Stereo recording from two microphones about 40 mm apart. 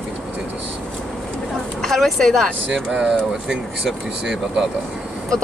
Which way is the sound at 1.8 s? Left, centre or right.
Centre.